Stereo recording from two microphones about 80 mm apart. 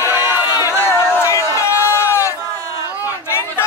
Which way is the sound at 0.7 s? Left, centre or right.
Left.